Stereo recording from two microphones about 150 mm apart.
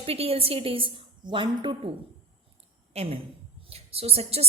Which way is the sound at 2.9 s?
45° right (ahead or behind).